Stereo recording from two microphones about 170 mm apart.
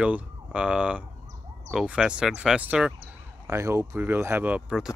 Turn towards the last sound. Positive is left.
turn(degrees=-5)  # may be behind; listen again after turning